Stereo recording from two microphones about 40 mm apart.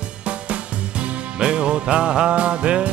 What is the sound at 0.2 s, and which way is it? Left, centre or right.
Music, right.